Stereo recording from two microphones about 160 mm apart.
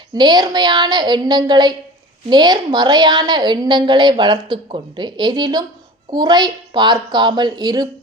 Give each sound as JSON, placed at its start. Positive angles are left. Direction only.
{"t": 0.1, "sound": "a woman's voice", "side_deg": -25}